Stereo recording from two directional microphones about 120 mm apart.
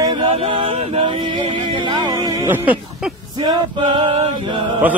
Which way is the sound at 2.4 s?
15° right (ahead or behind).